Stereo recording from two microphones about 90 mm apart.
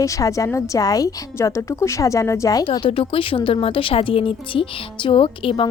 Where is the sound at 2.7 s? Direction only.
75° left (ahead or behind).